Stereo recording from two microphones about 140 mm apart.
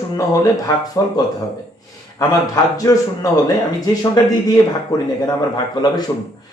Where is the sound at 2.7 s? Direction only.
25° left (ahead or behind).